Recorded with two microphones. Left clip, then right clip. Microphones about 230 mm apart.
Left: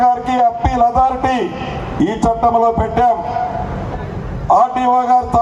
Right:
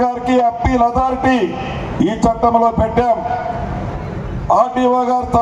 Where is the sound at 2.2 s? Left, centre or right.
Left.